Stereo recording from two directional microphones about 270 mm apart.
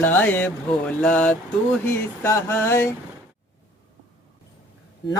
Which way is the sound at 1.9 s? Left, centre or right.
Centre.